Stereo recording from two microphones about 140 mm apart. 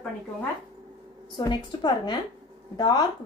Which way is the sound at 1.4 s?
30° left (ahead or behind).